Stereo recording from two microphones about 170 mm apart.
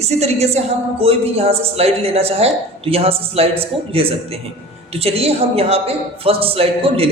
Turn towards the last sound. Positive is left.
turn(degrees=-35)  # may be behind; listen again after turning